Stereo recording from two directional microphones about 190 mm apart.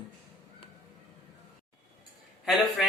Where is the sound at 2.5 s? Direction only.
Centre (ahead or behind).